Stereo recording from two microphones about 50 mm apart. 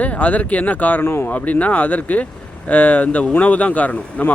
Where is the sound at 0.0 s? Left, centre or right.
Left.